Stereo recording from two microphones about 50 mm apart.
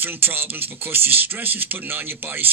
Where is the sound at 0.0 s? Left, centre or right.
Right.